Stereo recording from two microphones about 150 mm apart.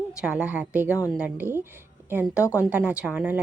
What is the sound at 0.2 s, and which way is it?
A woman's voice, 5° right (ahead or behind).